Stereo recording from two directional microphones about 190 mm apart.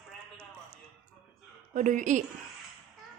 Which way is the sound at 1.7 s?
40° right (ahead or behind).